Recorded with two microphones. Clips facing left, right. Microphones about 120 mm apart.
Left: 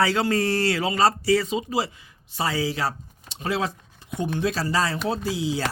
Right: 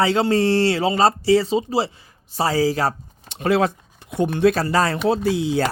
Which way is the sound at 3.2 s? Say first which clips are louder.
Right 8 dB; 60° right (ahead or behind).